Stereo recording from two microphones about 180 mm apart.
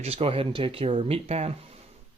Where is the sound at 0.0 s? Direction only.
35° right (ahead or behind).